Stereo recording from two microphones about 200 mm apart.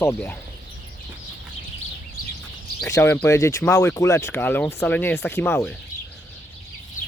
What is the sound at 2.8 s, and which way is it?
Speech, 15° left (ahead or behind).